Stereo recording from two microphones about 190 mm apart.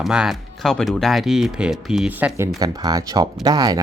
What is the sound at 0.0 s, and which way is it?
Speech, centre (ahead or behind).